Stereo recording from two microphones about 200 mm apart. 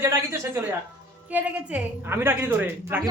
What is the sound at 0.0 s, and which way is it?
A woman's voice, 10° right (ahead or behind).